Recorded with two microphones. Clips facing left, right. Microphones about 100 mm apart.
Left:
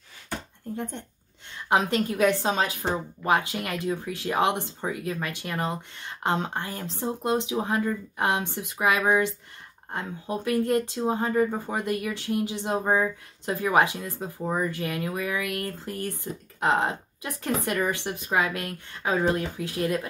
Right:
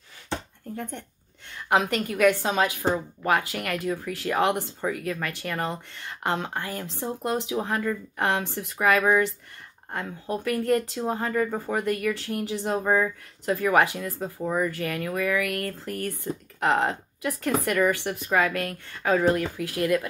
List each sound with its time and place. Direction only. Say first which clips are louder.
1.7 s speech: even; 25° left (ahead or behind)